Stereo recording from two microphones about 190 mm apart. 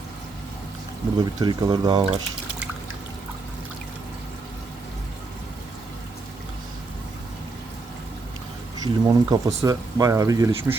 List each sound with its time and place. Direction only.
1.2 s speech: 20° right (ahead or behind)
8.8 s speech: 20° right (ahead or behind)